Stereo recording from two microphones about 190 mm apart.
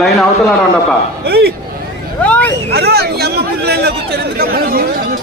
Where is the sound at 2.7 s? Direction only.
60° right (ahead or behind).